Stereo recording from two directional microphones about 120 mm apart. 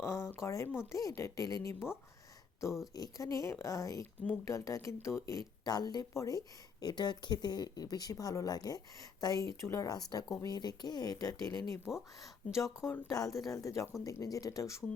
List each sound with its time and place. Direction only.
0.0 s speech: 20° left (ahead or behind)
11.9 s speech: centre (ahead or behind)
12.5 s speech: 25° left (ahead or behind)